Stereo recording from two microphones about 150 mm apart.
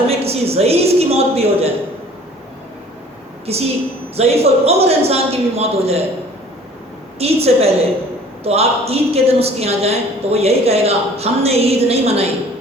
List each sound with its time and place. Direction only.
0.1 s a woman's voice: 40° right (ahead or behind)
3.4 s a woman's voice: 45° right (ahead or behind)
7.2 s a woman's voice: 40° right (ahead or behind)